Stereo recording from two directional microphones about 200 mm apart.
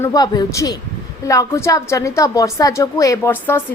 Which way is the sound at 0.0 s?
20° left (ahead or behind).